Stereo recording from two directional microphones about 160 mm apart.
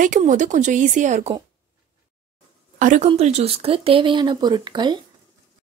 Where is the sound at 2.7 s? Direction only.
50° right (ahead or behind); by 5.0 s 25° right (ahead or behind).